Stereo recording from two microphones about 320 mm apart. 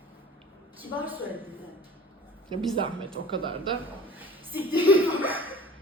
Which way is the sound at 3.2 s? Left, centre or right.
Centre.